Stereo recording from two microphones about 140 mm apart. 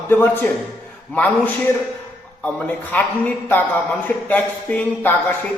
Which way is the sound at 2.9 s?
10° left (ahead or behind).